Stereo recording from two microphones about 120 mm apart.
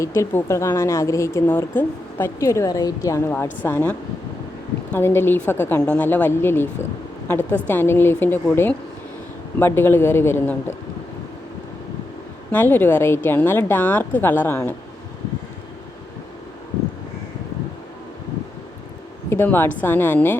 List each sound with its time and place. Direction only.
0.0 s a woman's voice: 25° left (ahead or behind)
7.7 s a woman's voice: 15° left (ahead or behind)
12.5 s a woman's voice: 15° left (ahead or behind)
19.3 s a woman's voice: 15° left (ahead or behind)